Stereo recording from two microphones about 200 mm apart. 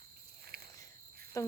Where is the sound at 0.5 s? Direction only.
50° right (ahead or behind).